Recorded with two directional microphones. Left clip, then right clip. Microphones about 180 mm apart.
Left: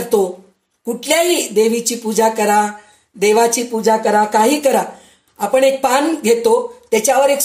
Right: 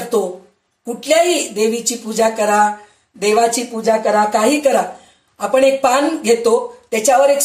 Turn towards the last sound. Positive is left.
turn(degrees=45)  # may be behind; listen again after turning